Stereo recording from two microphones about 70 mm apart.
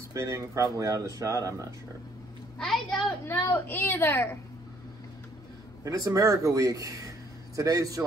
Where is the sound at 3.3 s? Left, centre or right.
Left.